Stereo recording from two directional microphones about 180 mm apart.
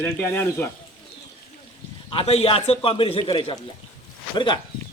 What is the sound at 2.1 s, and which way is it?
A man's voice, 30° left (ahead or behind).